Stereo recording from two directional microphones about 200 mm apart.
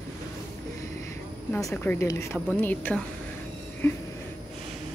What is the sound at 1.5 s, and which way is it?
Speech, 10° left (ahead or behind).